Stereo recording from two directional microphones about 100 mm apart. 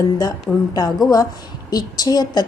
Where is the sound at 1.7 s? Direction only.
40° left (ahead or behind).